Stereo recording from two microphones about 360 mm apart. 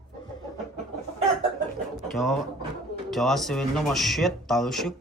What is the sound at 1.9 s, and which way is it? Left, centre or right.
Bird, centre.